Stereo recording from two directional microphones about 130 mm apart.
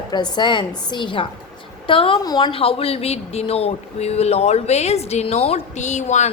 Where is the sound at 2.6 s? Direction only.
45° left (ahead or behind).